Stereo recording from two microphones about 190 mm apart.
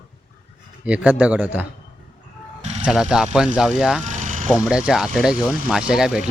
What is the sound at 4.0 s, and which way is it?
Vehicle, 40° right (ahead or behind).